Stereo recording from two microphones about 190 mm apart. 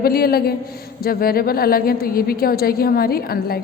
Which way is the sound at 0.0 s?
50° left (ahead or behind).